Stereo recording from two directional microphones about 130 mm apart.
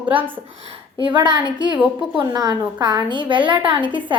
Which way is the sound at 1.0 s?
35° right (ahead or behind).